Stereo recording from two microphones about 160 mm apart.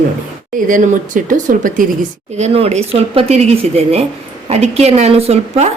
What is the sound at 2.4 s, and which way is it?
Speech, 45° right (ahead or behind).